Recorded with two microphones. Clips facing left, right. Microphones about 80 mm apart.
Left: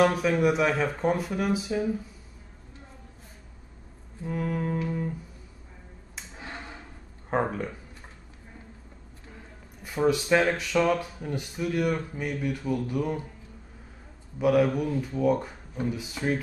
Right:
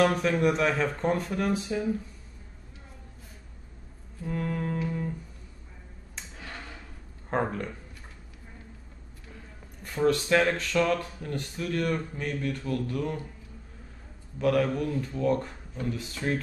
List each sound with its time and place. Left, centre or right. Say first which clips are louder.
0.0 s speech: left 1 dB; centre
4.3 s speech: left 2 dB; centre
6.3 s a sound: left 3 dB; left
7.2 s speech: left 2 dB; centre
9.8 s speech: left 1 dB; centre
14.4 s speech: left 3 dB; centre